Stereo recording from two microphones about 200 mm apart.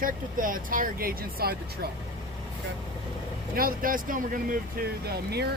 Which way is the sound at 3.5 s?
45° right (ahead or behind).